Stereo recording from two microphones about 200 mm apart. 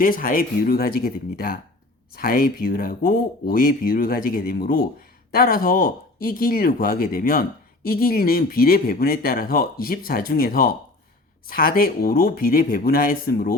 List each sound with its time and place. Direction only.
0.0 s speech: 45° left (ahead or behind)